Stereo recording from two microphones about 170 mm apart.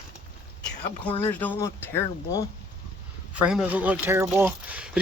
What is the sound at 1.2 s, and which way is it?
Speech, 10° left (ahead or behind).